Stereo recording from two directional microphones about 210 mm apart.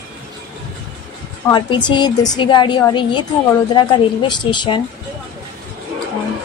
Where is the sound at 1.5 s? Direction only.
20° left (ahead or behind).